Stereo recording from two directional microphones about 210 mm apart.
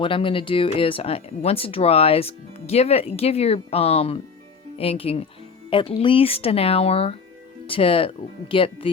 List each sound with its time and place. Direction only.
0.0 s speech: 25° left (ahead or behind)